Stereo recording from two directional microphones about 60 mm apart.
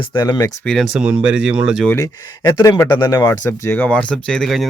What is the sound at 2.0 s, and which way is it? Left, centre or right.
Speech, left.